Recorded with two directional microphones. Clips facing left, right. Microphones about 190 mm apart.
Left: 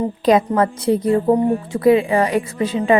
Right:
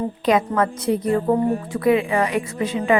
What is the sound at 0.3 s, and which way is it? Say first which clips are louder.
A woman's voice: left 4 dB; 35° left (ahead or behind).